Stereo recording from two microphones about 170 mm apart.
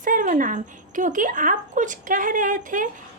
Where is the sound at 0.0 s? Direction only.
50° right (ahead or behind).